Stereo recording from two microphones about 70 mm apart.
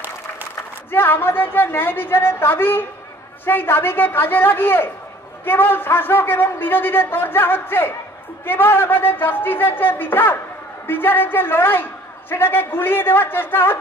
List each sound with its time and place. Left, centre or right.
0.9 s a man's voice: left